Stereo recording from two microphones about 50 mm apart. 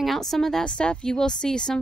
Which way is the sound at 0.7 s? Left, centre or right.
Centre.